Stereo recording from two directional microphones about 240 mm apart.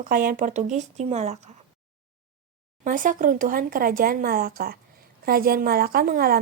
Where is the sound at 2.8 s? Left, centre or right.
Right.